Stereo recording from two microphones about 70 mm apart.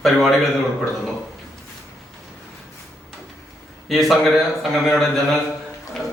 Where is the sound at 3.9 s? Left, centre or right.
Centre.